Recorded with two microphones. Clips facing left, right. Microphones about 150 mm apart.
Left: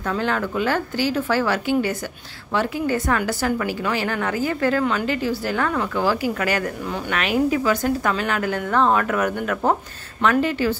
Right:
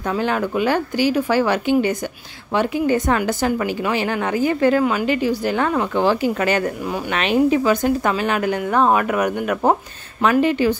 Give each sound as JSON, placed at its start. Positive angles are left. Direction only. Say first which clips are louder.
{"t": 0.0, "sound": "a woman's voice", "louder": "right 3 dB", "side_deg": -15}